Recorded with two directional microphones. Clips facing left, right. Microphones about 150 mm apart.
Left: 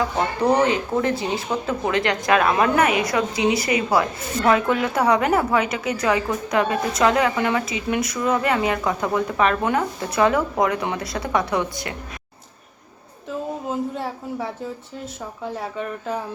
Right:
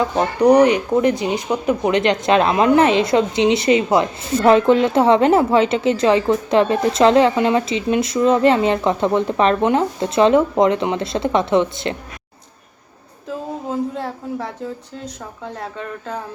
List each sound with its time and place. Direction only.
0.0 s a woman's voice: 15° right (ahead or behind)
13.2 s speech: centre (ahead or behind)